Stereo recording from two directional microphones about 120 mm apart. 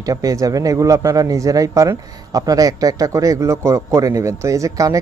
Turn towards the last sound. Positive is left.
turn(degrees=-25)  # may be behind; listen again after turning